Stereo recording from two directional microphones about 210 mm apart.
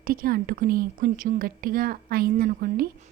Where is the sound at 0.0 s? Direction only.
45° right (ahead or behind).